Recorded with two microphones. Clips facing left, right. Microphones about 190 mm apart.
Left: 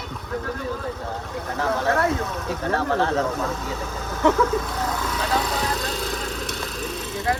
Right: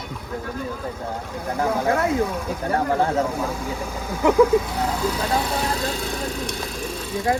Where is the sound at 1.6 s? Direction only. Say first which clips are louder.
Right 1 dB; 15° right (ahead or behind).